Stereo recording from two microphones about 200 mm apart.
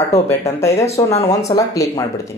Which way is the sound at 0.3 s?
15° left (ahead or behind).